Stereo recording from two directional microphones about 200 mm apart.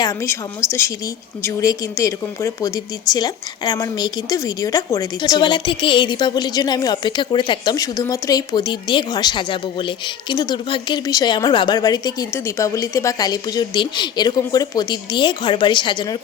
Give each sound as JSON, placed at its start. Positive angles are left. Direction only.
{"t": 1.5, "sound": "a woman's voice", "side_deg": 15}